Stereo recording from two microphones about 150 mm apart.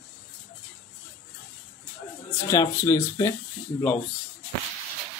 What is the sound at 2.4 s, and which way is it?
Speech, 20° left (ahead or behind).